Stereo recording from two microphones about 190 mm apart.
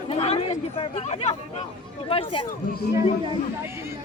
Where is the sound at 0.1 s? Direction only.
30° left (ahead or behind).